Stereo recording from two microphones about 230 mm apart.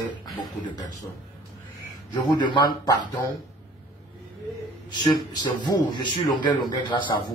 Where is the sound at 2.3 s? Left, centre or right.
Centre.